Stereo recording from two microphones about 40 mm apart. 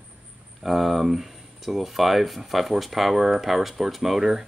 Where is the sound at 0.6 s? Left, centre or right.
Centre.